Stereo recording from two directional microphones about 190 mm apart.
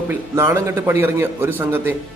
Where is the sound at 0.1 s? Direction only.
15° right (ahead or behind).